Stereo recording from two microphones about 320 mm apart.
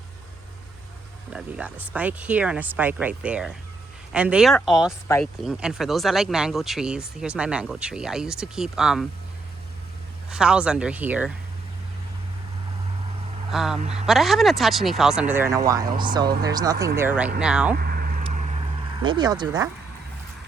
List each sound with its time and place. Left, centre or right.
1.3 s speech: centre
10.2 s speech: centre
13.5 s speech: centre
17.7 s vehicle: right
19.0 s speech: centre